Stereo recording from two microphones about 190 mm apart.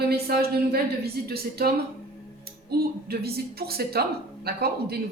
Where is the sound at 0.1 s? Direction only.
55° right (ahead or behind).